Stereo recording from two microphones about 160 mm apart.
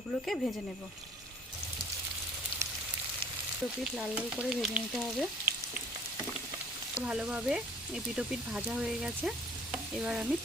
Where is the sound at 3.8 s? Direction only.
Centre (ahead or behind).